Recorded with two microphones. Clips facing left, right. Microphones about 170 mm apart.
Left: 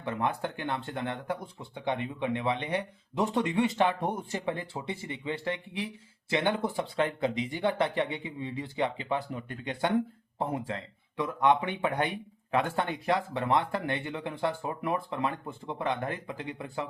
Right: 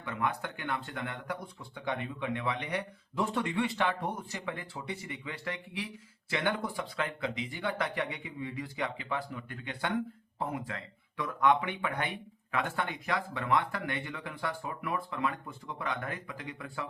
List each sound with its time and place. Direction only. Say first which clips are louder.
0.0 s speech: left 3 dB; 30° left (ahead or behind)